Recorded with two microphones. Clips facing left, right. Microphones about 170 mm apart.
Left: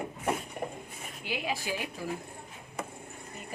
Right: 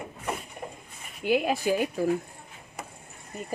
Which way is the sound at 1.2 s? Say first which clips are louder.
Right 10 dB; 50° right (ahead or behind).